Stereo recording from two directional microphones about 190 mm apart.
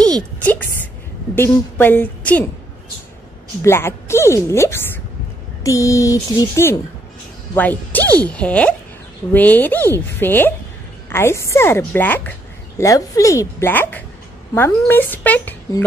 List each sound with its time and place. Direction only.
0.0 s a woman's voice: 5° left (ahead or behind)
3.6 s speech: 15° left (ahead or behind)